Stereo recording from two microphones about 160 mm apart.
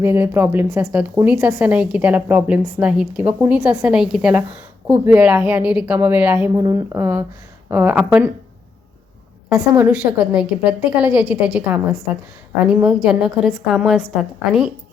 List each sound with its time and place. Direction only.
0.0 s a woman's voice: 15° right (ahead or behind)
9.6 s a woman's voice: 10° right (ahead or behind)